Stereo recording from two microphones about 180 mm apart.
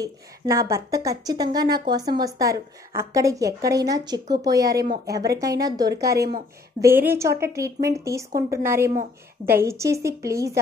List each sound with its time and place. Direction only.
0.0 s a woman's voice: 15° right (ahead or behind)
4.7 s speech: 55° right (ahead or behind)
5.0 s a woman's voice: 20° right (ahead or behind)
6.1 s speech: 60° right (ahead or behind)
6.8 s a woman's voice: 10° right (ahead or behind)